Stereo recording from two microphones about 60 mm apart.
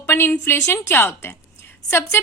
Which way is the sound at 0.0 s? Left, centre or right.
Left.